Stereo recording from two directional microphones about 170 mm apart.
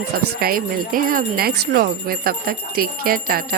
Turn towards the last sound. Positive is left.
turn(degrees=-60)  # may be behind; listen again after turning